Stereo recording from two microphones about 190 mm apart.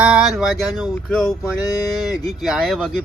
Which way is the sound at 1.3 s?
20° left (ahead or behind).